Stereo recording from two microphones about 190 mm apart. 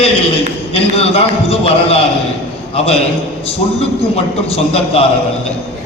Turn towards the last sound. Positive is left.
turn(degrees=30)  # may be behind; listen again after turning